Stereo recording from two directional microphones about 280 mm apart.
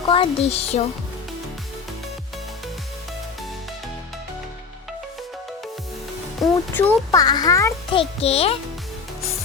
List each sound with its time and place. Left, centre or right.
0.1 s music: left
6.4 s a child's voice: centre
8.2 s music: left